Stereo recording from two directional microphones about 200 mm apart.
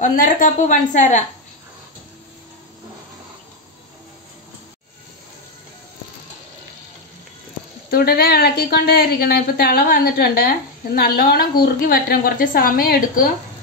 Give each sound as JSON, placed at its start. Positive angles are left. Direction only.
{"t": 0.0, "sound": "a woman's voice", "side_deg": 45}
{"t": 7.9, "sound": "speech", "side_deg": 50}